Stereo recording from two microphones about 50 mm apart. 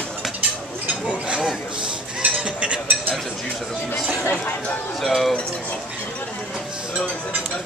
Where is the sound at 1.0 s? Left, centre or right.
Right.